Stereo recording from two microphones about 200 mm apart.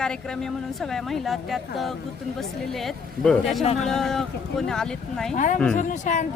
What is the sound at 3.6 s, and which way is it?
Speech, 30° left (ahead or behind).